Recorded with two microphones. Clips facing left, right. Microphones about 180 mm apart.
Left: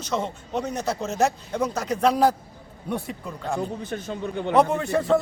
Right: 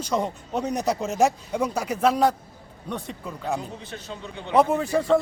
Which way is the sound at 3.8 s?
50° left (ahead or behind).